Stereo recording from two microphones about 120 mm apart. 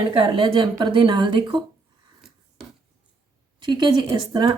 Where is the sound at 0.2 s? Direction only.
45° right (ahead or behind).